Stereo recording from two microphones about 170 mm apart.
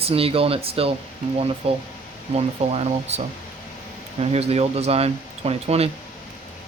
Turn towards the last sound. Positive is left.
turn(degrees=-35)  # may be behind; listen again after turning